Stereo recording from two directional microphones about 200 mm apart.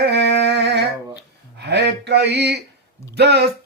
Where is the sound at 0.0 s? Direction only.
55° right (ahead or behind).